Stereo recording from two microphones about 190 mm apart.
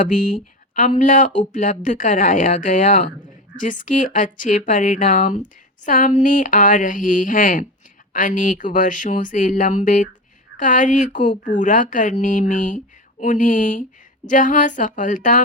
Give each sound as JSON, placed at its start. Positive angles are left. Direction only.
{"t": 0.7, "sound": "speech", "side_deg": 45}